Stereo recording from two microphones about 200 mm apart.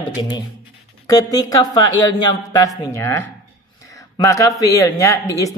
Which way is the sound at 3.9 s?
15° left (ahead or behind).